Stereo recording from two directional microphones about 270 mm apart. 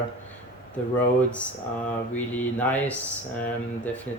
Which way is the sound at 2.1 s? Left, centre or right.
Centre.